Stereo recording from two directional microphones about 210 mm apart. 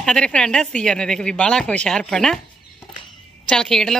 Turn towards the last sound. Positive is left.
turn(degrees=0)  # may be behind; listen again after turning